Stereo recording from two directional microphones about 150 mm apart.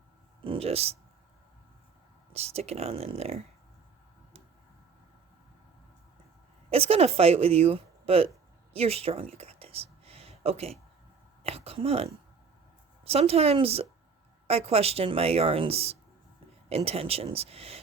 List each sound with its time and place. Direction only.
0.4 s speech: 40° right (ahead or behind)
2.3 s speech: 45° right (ahead or behind)
6.7 s speech: 40° right (ahead or behind)
8.7 s a sound: 40° right (ahead or behind)
11.4 s speech: 40° right (ahead or behind)